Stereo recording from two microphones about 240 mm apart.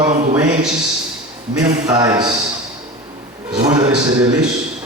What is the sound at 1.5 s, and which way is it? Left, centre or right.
Speech, centre.